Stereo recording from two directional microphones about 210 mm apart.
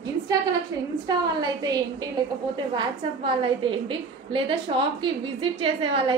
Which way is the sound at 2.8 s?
25° right (ahead or behind).